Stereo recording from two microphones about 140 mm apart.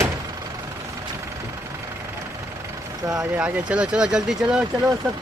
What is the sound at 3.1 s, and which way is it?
Speech, 5° right (ahead or behind).